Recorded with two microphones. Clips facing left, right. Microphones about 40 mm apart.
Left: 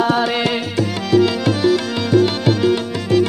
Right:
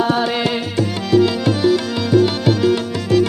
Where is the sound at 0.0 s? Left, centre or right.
Left.